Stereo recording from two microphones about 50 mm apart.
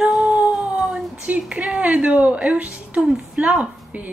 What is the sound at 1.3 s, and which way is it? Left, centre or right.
A woman's voice, right.